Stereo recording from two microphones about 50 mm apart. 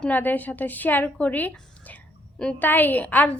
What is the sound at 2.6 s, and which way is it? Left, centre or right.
Speech, left.